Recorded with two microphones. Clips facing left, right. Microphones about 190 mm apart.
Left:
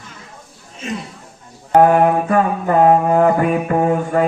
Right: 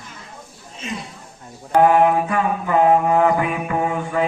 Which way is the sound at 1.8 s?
45° left (ahead or behind).